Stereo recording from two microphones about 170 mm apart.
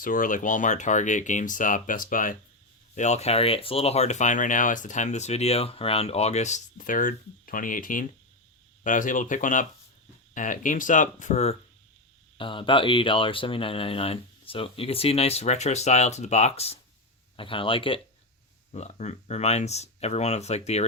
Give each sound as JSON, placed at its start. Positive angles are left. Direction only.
{"t": 0.0, "sound": "speech", "side_deg": 55}
{"t": 2.9, "sound": "speech", "side_deg": 40}
{"t": 12.4, "sound": "speech", "side_deg": 30}
{"t": 18.7, "sound": "speech", "side_deg": 40}